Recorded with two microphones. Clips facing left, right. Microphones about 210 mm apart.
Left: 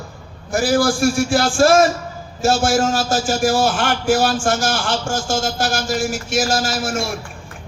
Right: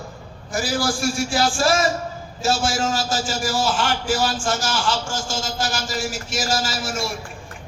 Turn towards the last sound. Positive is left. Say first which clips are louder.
# left 4 dB
turn(degrees=50)  # may be behind; listen again after turning